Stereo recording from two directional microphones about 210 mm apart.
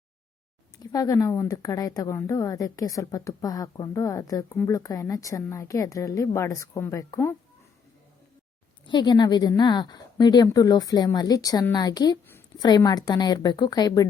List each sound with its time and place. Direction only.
0.8 s a woman's voice: 15° left (ahead or behind)
8.9 s a woman's voice: 20° left (ahead or behind)